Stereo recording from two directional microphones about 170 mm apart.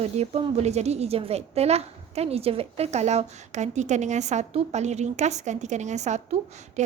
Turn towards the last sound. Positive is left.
turn(degrees=-45)  # may be behind; listen again after turning